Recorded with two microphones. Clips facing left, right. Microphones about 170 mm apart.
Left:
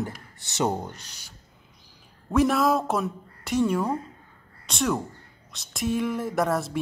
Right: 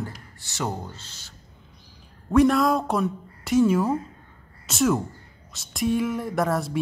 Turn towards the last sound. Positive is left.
turn(degrees=0)  # may be behind; listen again after turning